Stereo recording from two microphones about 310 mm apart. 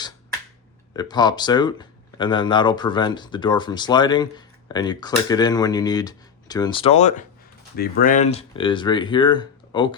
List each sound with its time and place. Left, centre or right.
0.9 s speech: centre